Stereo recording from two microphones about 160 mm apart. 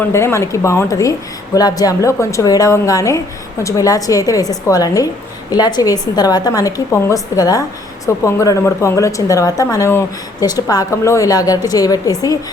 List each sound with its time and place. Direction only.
0.0 s a woman's voice: 15° left (ahead or behind)